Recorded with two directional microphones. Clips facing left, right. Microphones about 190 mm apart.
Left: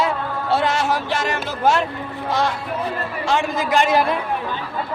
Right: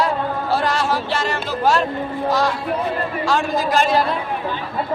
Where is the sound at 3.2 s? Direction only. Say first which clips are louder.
Even; 20° left (ahead or behind).